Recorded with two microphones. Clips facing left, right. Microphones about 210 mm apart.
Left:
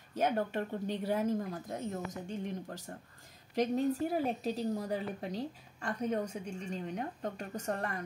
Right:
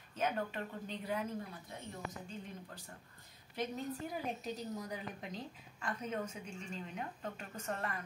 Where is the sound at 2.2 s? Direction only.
85° left.